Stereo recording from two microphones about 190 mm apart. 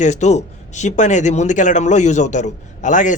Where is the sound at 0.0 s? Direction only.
40° left (ahead or behind).